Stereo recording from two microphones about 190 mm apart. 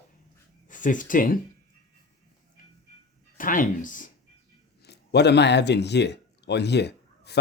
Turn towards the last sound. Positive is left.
turn(degrees=60)  # may be behind; listen again after turning